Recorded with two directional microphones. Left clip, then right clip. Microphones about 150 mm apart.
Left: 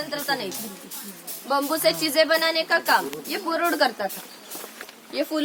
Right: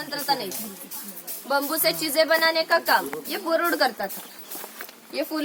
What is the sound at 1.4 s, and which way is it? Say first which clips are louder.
A woman's voice: left 2 dB; 25° right (ahead or behind).